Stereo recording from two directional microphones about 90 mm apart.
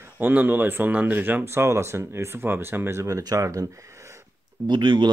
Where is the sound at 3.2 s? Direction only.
40° right (ahead or behind).